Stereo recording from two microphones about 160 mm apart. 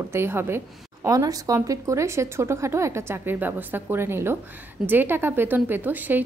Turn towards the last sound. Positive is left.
turn(degrees=-10)  # may be behind; listen again after turning